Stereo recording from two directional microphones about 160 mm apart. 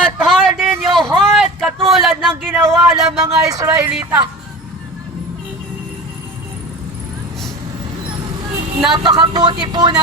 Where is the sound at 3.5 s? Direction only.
20° right (ahead or behind).